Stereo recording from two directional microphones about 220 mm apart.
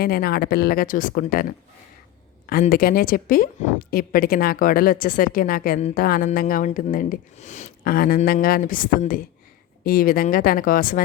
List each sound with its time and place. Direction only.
0.0 s a woman's voice: 45° left (ahead or behind)